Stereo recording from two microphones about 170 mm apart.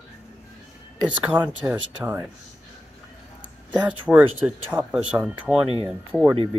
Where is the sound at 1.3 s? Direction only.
10° right (ahead or behind).